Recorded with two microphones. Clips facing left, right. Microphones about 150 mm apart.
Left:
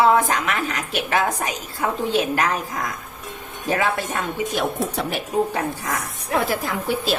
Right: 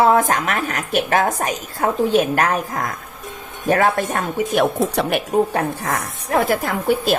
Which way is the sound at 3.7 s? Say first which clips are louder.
Right 5 dB; 50° right (ahead or behind).